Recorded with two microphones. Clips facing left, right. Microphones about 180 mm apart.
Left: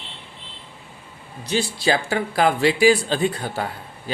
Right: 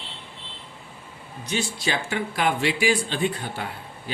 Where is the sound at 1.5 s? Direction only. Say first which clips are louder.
Left 6 dB; 35° left (ahead or behind).